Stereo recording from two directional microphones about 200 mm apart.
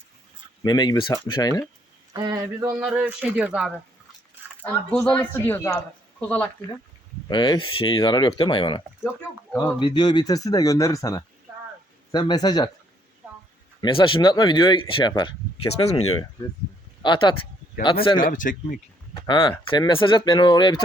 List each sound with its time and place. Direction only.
0.6 s speech: 20° left (ahead or behind)
2.1 s speech: 20° right (ahead or behind)
2.8 s speech: 5° right (ahead or behind)
4.6 s a man's voice: 5° left (ahead or behind)
7.3 s speech: 20° left (ahead or behind)
9.8 s speech: 20° left (ahead or behind)
13.8 s speech: 25° left (ahead or behind)
17.0 s speech: 25° left (ahead or behind)
18.3 s speech: 40° left (ahead or behind)
19.1 s speech: 20° left (ahead or behind)